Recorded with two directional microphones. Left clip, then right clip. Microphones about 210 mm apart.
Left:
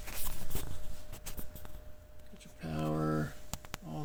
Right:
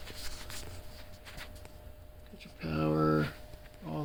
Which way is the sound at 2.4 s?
5° right (ahead or behind).